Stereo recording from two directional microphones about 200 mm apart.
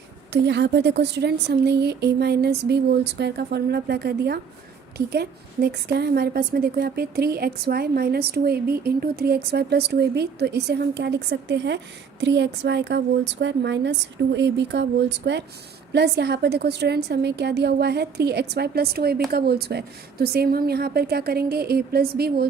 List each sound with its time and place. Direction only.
0.4 s a woman's voice: 60° right (ahead or behind)